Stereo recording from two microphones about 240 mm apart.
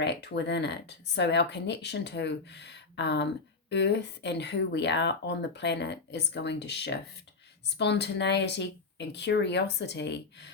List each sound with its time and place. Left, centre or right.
0.0 s speech: left